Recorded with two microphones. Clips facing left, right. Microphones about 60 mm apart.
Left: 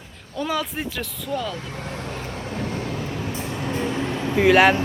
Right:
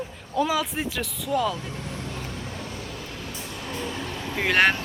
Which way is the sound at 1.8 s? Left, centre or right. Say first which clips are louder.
Left 3 dB; left.